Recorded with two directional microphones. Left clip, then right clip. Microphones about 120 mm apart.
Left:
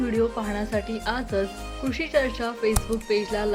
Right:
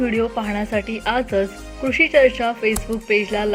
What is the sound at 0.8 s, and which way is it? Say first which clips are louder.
Speech: right 5 dB; 50° left (ahead or behind).